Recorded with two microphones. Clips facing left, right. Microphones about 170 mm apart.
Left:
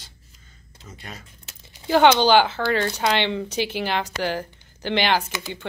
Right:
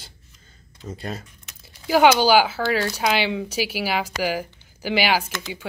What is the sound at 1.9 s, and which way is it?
Speech, 5° right (ahead or behind).